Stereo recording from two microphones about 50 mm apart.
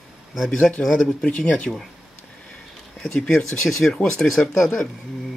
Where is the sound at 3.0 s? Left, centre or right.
Centre.